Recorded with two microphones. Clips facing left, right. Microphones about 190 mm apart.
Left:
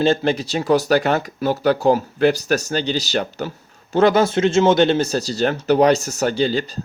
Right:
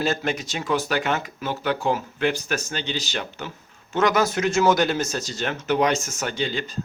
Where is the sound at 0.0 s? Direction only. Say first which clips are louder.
Left 7 dB; 30° left (ahead or behind).